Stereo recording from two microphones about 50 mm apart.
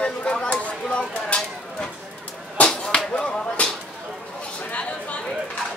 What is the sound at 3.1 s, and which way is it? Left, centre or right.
Speech, left.